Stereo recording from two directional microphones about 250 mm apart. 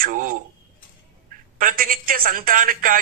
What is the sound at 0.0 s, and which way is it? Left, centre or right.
Speech, right.